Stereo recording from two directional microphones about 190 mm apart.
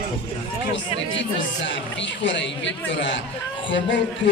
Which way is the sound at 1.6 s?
70° left (ahead or behind).